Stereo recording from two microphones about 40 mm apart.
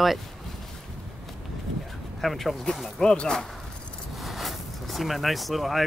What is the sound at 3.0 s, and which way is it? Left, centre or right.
Speech, centre.